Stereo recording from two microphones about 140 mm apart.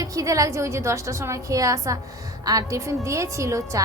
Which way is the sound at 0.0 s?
25° right (ahead or behind).